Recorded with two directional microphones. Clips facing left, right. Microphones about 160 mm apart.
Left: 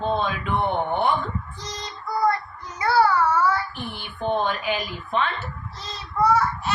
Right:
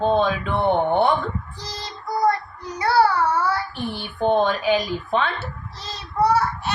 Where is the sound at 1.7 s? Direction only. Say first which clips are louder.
Right 2 dB; 35° right (ahead or behind).